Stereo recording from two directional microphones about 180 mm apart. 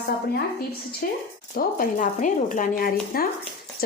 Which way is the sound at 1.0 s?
50° left (ahead or behind).